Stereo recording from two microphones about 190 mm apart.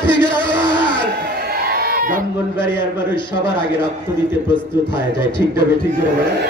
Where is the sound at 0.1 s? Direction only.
25° left (ahead or behind).